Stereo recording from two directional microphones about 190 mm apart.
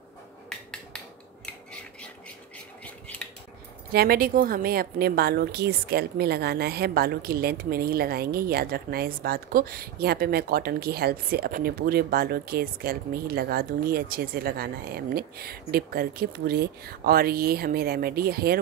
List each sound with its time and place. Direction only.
2.8 s cutlery: 5° left (ahead or behind)
3.9 s a woman's voice: 55° right (ahead or behind)